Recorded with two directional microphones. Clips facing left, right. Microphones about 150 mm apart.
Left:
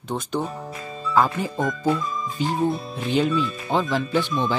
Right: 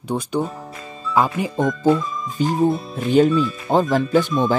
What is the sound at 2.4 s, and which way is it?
Speech, 45° right (ahead or behind).